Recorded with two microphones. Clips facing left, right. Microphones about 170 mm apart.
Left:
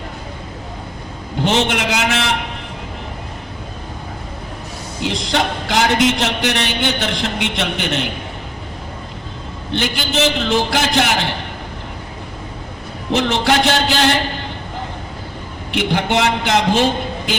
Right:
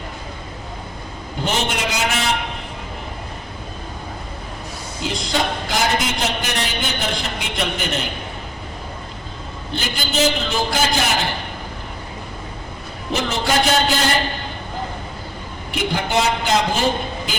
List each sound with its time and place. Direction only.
1.5 s a man's voice: 75° left (ahead or behind)
5.0 s a man's voice: 80° left
9.7 s a man's voice: 75° left (ahead or behind)
13.1 s a man's voice: 75° left (ahead or behind)
15.7 s a man's voice: 75° left (ahead or behind)